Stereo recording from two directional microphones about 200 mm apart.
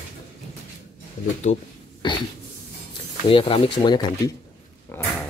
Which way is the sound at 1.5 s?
40° left (ahead or behind).